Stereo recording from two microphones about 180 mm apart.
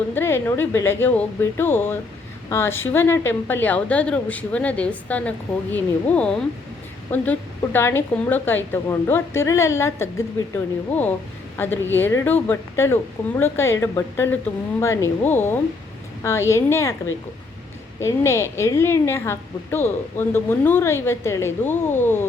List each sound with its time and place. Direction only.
0.1 s a woman's voice: 10° left (ahead or behind)
18.0 s a woman's voice: 15° left (ahead or behind)